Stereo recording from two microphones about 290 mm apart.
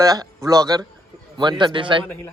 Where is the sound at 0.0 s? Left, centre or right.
Centre.